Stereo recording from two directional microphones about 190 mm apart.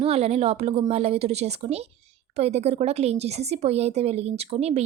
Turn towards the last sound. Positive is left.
turn(degrees=-35)  # may be behind; listen again after turning